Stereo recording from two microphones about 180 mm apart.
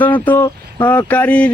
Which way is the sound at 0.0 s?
10° left (ahead or behind).